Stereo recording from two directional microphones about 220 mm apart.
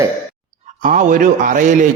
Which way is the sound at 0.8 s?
35° right (ahead or behind).